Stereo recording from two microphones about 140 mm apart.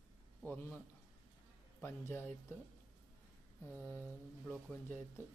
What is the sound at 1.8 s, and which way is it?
Speech, 15° left (ahead or behind).